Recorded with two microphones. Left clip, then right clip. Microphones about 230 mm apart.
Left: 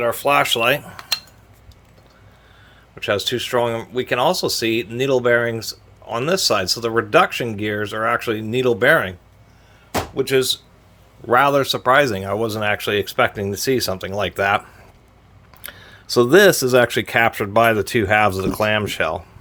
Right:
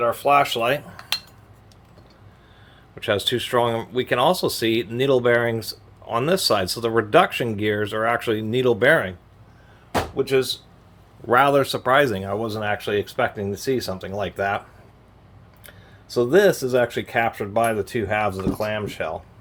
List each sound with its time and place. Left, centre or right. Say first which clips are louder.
0.0 s speech: left 1 dB; left
2.9 s speech: left 1 dB; centre
9.9 s speech: left 2 dB; left
11.3 s speech: left 2 dB; centre; by 14.6 s left
15.6 s speech: left 11 dB; left